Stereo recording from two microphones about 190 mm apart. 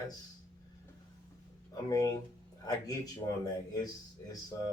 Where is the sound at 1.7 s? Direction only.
20° left (ahead or behind).